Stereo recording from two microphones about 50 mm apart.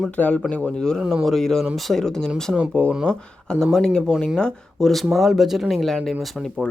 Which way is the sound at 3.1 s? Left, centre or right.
Centre.